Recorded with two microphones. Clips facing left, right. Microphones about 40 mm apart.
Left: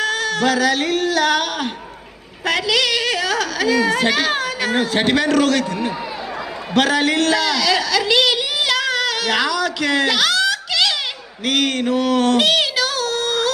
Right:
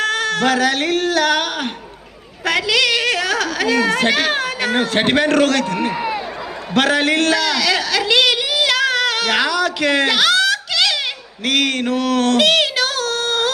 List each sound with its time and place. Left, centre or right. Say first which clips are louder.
0.0 s a sound: right 1 dB; right
2.4 s a woman's voice: right 1 dB; right
6.7 s a woman's voice: right 1 dB; right
11.4 s mantra: right 1 dB; right
12.4 s child singing: right 2 dB; right